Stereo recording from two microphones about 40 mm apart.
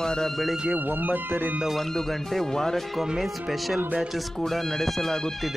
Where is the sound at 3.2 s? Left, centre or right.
Centre.